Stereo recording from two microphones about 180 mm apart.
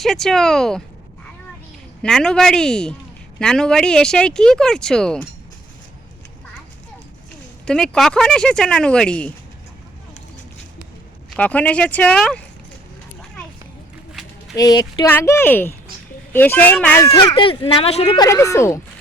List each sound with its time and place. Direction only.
0.0 s speech: centre (ahead or behind)
2.0 s speech: 5° left (ahead or behind)
7.6 s speech: 5° left (ahead or behind)
11.3 s speech: 10° left (ahead or behind)
14.1 s a sound: centre (ahead or behind)
14.5 s speech: 20° left (ahead or behind)
17.0 s speech: 20° left (ahead or behind)
18.2 s speech: 15° left (ahead or behind)